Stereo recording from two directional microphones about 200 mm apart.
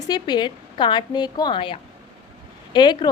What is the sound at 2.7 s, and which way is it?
Speech, 20° left (ahead or behind).